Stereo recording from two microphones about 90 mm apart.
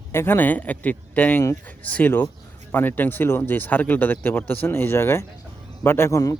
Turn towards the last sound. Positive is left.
turn(degrees=30)  # may be behind; listen again after turning